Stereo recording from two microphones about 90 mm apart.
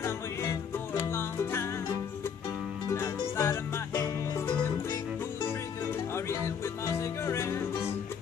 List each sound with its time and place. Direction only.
0.0 s music: 35° left (ahead or behind)
2.9 s music: 30° left (ahead or behind)
6.1 s music: 30° left (ahead or behind)